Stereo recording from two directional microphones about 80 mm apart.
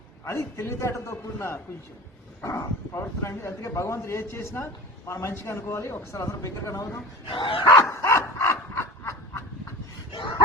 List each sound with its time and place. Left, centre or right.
0.3 s speech: left
7.3 s dog: left
7.6 s dog: left
7.9 s sawing: left
10.1 s a sound: left